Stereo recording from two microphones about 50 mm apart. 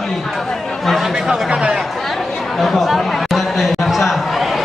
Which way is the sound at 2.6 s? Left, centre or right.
Centre.